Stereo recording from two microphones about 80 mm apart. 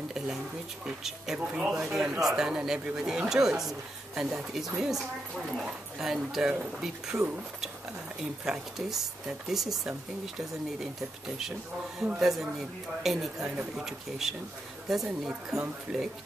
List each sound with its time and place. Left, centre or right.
0.8 s speech: centre
8.5 s speech: centre
15.5 s speech: centre